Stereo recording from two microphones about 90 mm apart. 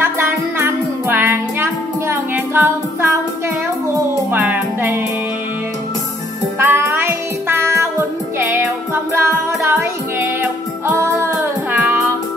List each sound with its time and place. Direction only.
0.0 s music: 25° right (ahead or behind)
4.3 s music: 20° right (ahead or behind)
6.6 s music: 25° right (ahead or behind)